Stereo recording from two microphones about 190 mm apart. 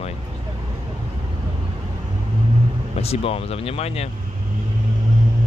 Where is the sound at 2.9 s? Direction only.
30° left (ahead or behind).